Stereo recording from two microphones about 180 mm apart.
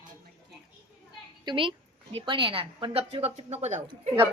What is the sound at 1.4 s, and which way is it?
A woman's voice, 30° right (ahead or behind).